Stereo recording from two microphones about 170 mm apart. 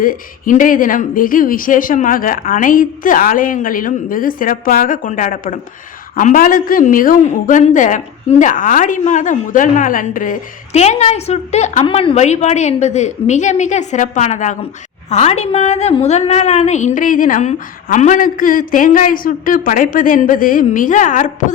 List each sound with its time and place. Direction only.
0.0 s speech: 55° left (ahead or behind)